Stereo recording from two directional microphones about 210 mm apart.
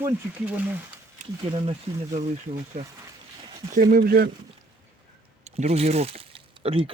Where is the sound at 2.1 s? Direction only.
35° right (ahead or behind).